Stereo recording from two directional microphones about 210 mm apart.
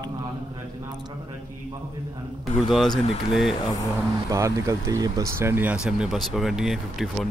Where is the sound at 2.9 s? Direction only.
25° left (ahead or behind).